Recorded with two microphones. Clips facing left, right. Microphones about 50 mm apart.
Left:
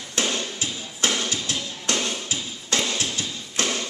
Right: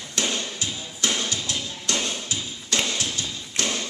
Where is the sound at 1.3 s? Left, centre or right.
Left.